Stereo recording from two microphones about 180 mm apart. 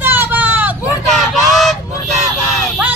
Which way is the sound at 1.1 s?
Centre (ahead or behind).